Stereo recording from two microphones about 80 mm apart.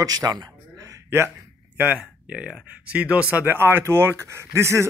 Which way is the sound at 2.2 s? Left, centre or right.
Centre.